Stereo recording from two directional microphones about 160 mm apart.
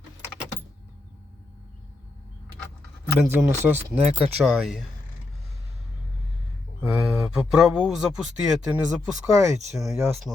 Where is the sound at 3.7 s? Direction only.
15° right (ahead or behind).